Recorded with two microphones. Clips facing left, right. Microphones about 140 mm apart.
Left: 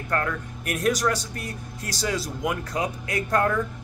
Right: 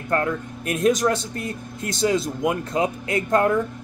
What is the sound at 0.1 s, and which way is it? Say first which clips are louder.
Speech: right 4 dB; 25° right (ahead or behind).